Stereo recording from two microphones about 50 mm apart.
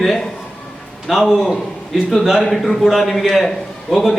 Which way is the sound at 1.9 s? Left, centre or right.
Centre.